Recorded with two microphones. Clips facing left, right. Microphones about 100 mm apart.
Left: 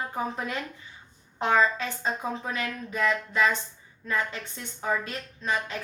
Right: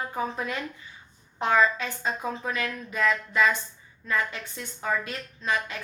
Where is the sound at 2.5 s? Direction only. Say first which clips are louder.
Right 1 dB; 30° left (ahead or behind).